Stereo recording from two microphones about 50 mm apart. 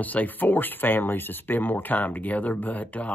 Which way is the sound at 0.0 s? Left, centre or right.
Left.